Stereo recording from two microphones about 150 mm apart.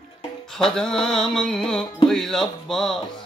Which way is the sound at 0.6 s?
5° left (ahead or behind).